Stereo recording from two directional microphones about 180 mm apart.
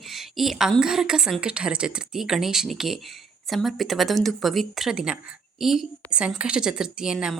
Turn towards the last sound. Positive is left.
turn(degrees=-5)  # may be behind; listen again after turning